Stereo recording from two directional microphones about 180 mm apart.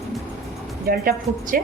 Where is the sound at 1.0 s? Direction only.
55° right (ahead or behind).